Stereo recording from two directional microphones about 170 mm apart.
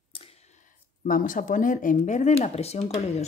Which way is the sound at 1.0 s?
50° left (ahead or behind).